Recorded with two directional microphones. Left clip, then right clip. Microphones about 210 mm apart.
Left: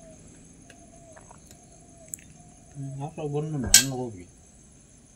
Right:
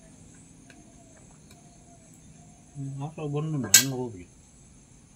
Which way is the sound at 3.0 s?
15° left (ahead or behind).